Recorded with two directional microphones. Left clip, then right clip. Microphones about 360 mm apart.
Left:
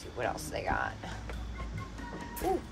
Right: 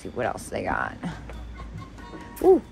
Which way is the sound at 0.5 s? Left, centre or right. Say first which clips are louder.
Right 6 dB; centre.